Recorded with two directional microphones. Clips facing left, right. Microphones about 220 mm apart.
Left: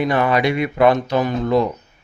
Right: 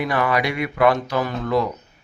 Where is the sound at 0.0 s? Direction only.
25° left (ahead or behind).